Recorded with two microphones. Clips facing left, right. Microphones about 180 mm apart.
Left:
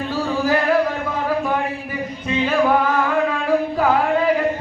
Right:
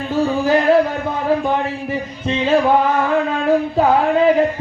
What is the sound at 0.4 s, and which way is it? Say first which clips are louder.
Music: right 4 dB; 25° right (ahead or behind).